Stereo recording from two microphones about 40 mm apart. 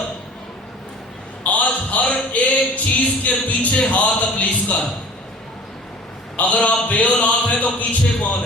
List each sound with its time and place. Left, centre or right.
1.5 s a sound: left
3.2 s a man's voice: left
6.3 s a man's voice: left